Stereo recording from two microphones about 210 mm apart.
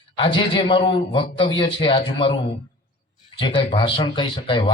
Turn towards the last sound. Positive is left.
turn(degrees=25)  # may be behind; listen again after turning